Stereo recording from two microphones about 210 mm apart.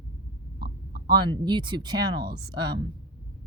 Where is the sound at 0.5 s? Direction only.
50° right (ahead or behind).